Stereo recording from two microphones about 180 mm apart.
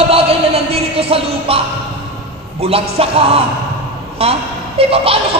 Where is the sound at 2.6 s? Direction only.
30° right (ahead or behind).